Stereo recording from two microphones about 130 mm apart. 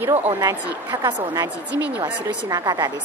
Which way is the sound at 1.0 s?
30° right (ahead or behind).